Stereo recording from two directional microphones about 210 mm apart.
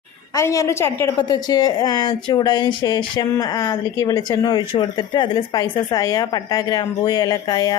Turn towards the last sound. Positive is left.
turn(degrees=20)  # may be behind; listen again after turning